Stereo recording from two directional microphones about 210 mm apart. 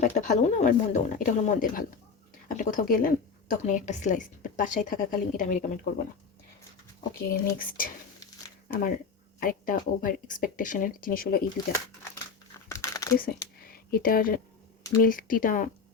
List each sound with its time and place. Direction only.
0.0 s a woman's voice: 35° left (ahead or behind)
7.2 s speech: 45° left (ahead or behind)
9.4 s a woman's voice: 40° left (ahead or behind)
12.6 s a sound: 15° left (ahead or behind)
13.1 s a woman's voice: 45° left (ahead or behind)